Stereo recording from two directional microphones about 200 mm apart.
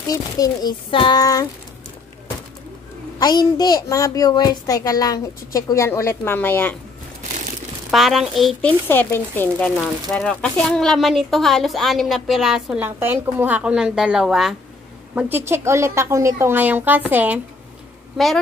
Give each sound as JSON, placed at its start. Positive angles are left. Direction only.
{"t": 0.1, "sound": "a sound", "side_deg": 20}
{"t": 3.2, "sound": "a child's voice", "side_deg": 20}
{"t": 7.9, "sound": "a child's voice", "side_deg": 0}